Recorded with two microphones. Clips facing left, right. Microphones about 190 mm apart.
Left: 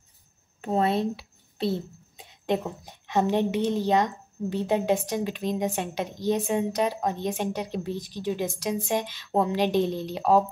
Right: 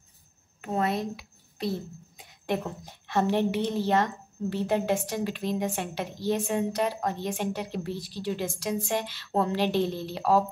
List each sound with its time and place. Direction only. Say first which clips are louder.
0.6 s a child's voice: left 4 dB; 30° left (ahead or behind)